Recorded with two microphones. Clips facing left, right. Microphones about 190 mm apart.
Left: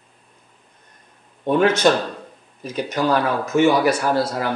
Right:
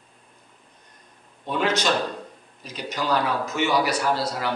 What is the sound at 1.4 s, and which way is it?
A man's voice, 50° left (ahead or behind).